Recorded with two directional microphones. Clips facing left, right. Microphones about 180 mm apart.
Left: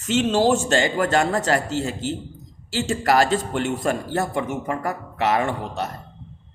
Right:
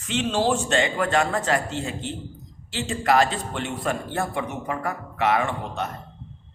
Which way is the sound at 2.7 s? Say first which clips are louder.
Left 2 dB; 40° left (ahead or behind).